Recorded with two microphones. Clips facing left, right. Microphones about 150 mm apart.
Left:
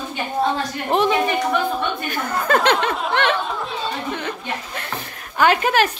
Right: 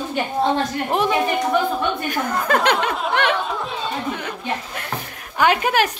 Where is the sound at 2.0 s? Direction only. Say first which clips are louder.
Right 1 dB; 5° right (ahead or behind).